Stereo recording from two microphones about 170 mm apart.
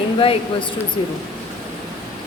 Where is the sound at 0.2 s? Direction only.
30° left (ahead or behind).